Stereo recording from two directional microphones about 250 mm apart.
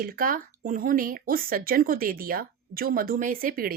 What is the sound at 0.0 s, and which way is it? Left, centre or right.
A woman's voice, right.